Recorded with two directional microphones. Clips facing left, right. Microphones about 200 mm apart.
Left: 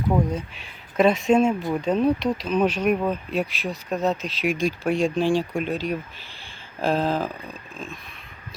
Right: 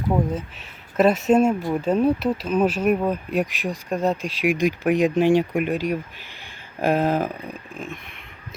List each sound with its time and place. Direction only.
0.9 s speech: 5° right (ahead or behind); by 7.9 s 20° right (ahead or behind)